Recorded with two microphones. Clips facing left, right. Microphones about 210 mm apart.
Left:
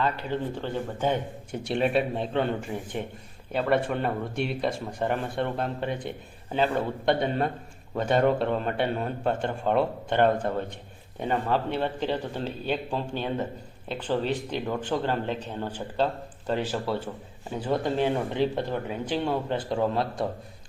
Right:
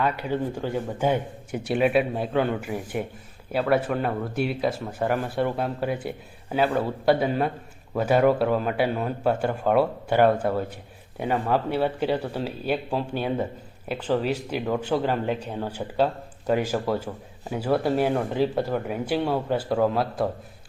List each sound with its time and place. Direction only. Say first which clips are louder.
0.0 s speech: right 3 dB; 10° right (ahead or behind)